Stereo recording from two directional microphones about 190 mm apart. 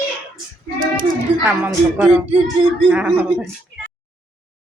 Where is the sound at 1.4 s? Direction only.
10° right (ahead or behind).